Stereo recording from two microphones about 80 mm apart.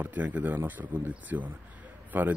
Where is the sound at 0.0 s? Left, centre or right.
Centre.